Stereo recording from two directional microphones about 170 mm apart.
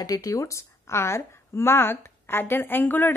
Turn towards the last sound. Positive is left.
turn(degrees=10)  # may be behind; listen again after turning